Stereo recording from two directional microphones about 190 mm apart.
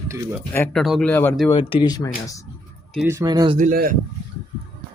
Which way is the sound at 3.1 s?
20° right (ahead or behind).